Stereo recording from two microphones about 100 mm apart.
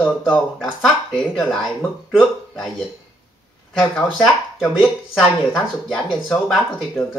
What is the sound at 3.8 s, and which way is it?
Speech, 5° right (ahead or behind).